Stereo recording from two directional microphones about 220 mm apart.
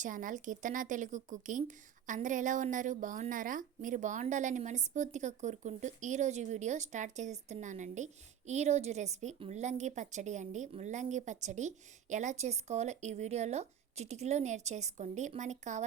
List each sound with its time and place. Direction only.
0.0 s speech: 35° right (ahead or behind)